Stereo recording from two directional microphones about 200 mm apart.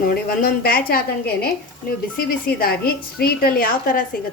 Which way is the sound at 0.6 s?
50° left (ahead or behind).